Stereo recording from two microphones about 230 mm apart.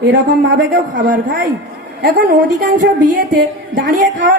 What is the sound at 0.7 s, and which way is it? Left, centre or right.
A woman's voice, right.